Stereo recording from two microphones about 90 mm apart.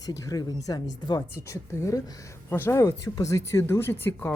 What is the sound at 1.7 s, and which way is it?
Speech, 30° left (ahead or behind).